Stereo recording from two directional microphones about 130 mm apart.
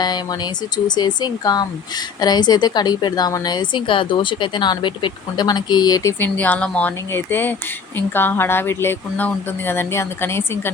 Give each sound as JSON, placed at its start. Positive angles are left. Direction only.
{"t": 0.0, "sound": "a woman's voice", "side_deg": 30}